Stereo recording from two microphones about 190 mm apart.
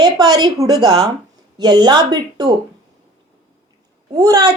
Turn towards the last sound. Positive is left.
turn(degrees=-20)  # may be behind; listen again after turning